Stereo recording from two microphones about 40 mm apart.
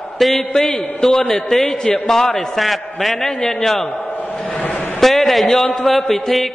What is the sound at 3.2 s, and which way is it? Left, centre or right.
Speech, centre.